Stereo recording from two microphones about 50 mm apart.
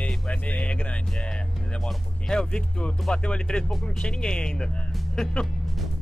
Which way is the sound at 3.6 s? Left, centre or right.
Centre.